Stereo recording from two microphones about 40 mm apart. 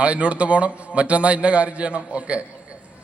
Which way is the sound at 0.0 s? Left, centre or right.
Right.